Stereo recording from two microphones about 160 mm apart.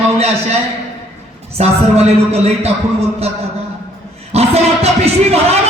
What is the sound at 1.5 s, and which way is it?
A man's voice, 40° right (ahead or behind).